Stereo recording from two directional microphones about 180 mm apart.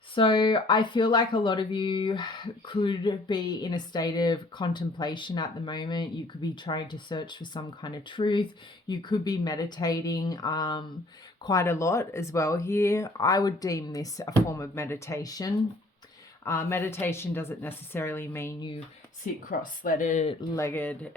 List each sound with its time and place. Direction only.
0.1 s speech: 25° left (ahead or behind)
19.2 s speech: 50° left (ahead or behind)
20.6 s speech: 15° left (ahead or behind)